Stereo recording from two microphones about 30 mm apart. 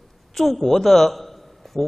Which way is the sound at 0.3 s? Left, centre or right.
Centre.